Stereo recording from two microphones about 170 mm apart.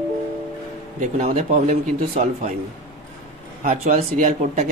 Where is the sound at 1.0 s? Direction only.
45° right (ahead or behind).